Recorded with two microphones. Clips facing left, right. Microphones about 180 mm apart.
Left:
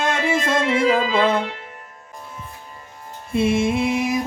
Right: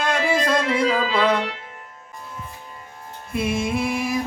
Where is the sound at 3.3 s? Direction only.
25° left (ahead or behind).